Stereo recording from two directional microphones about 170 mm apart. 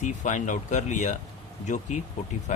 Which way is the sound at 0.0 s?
45° left (ahead or behind).